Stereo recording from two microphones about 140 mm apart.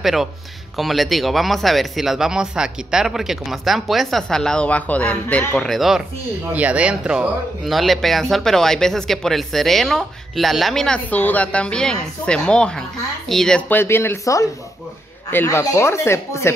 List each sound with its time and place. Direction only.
0.0 s speech: centre (ahead or behind); by 16.5 s 20° left (ahead or behind)